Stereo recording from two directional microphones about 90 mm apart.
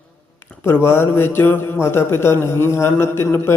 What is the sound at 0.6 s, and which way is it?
Speech, 30° left (ahead or behind).